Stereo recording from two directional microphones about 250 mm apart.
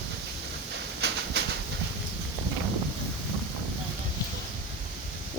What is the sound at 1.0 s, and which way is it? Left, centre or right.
Bird, right.